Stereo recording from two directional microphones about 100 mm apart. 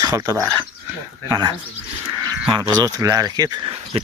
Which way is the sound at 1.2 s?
45° right (ahead or behind).